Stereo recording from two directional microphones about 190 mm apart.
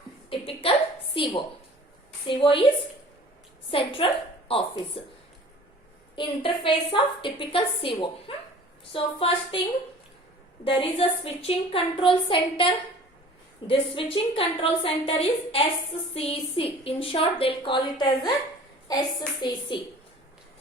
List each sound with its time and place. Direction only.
0.3 s a sound: 30° left (ahead or behind)
2.2 s a woman's voice: 25° left (ahead or behind)
3.7 s a woman's voice: 25° left (ahead or behind)
6.1 s a woman's voice: 25° left (ahead or behind)
10.6 s a woman's voice: 30° left (ahead or behind)